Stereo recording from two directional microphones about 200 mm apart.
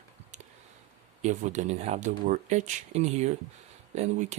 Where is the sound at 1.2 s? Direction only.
35° right (ahead or behind).